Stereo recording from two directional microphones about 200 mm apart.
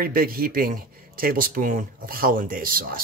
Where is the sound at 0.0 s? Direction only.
50° right (ahead or behind).